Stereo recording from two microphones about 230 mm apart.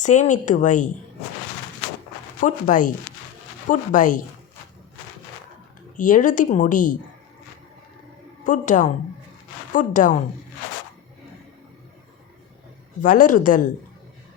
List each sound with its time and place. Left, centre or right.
0.0 s speech: left
2.4 s speech: left
6.0 s speech: left
8.4 s speech: left
13.0 s speech: left